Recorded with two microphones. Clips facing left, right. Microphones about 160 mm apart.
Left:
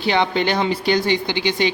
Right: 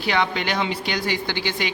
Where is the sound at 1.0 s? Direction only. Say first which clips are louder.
Left 5 dB; 20° left (ahead or behind).